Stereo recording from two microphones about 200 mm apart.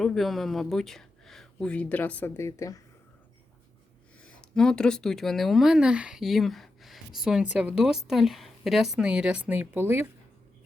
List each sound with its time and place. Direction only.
0.0 s speech: centre (ahead or behind)
4.2 s a woman's voice: 5° left (ahead or behind)